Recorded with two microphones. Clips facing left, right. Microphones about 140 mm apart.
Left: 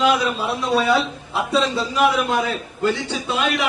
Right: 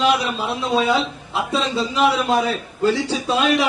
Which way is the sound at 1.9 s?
30° right (ahead or behind).